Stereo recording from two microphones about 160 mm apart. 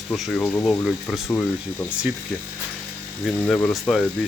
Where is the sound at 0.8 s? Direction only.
Centre (ahead or behind).